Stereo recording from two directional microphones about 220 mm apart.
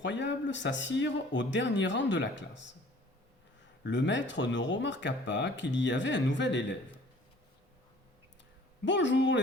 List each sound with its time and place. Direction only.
0.0 s speech: 55° left (ahead or behind)
3.8 s speech: 55° left (ahead or behind)
8.8 s speech: 55° left (ahead or behind)